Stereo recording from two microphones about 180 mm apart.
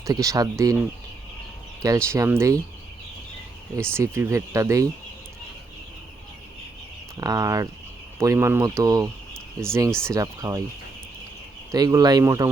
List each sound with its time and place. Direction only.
0.0 s speech: 20° right (ahead or behind)
1.8 s speech: 15° right (ahead or behind)
3.8 s speech: 15° right (ahead or behind)
7.2 s speech: 20° right (ahead or behind)
9.9 s speech: 5° left (ahead or behind)
10.2 s speech: 20° right (ahead or behind)
11.7 s speech: 20° right (ahead or behind)